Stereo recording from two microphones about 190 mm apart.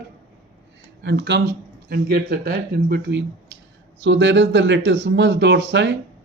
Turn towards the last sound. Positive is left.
turn(degrees=-65)  # may be behind; listen again after turning